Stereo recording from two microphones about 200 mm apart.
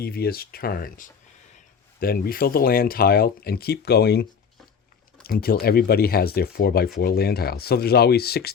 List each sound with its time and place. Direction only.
0.0 s speech: 50° left (ahead or behind)